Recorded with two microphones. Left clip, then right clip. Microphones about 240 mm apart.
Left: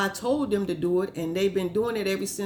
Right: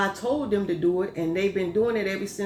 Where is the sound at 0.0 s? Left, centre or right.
Left.